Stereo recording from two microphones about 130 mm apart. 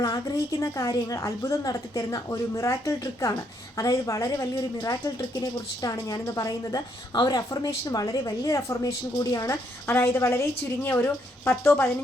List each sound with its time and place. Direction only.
0.0 s a woman's voice: 30° left (ahead or behind)